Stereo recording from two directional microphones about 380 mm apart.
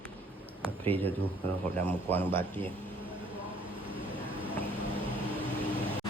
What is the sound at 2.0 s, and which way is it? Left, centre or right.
Speech, centre.